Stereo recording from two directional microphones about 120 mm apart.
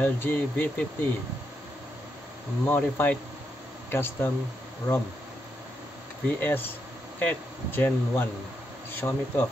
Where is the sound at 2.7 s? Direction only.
15° left (ahead or behind).